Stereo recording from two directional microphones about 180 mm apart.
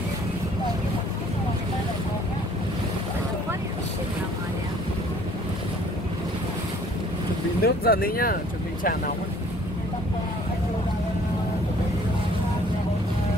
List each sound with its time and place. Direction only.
7.6 s speech: 55° left (ahead or behind)